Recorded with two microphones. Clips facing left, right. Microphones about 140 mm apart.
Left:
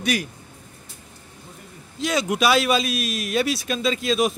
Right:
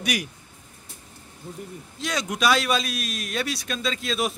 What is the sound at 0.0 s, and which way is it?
Speech, 15° right (ahead or behind).